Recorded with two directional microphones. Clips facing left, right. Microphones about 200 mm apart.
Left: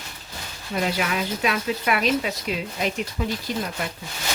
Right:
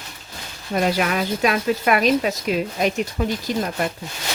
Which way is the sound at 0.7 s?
50° right (ahead or behind).